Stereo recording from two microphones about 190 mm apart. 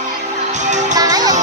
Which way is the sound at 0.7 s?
40° right (ahead or behind).